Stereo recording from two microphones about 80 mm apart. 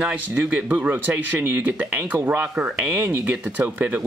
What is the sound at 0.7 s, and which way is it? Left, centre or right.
Speech, right.